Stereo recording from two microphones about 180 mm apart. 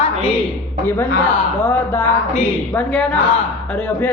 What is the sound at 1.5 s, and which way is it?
A woman's voice, 10° left (ahead or behind).